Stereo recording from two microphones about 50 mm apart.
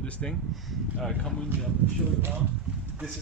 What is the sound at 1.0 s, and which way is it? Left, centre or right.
Speech, centre.